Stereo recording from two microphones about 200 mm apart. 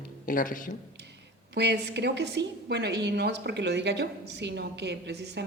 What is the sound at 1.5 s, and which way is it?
A woman's voice, 60° right (ahead or behind).